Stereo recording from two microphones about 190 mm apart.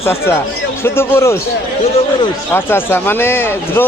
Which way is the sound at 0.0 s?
15° left (ahead or behind).